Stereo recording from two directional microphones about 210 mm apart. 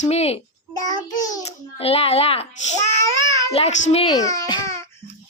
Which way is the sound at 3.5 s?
30° left (ahead or behind).